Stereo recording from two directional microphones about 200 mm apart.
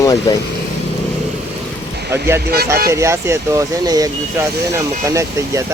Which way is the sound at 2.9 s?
15° right (ahead or behind).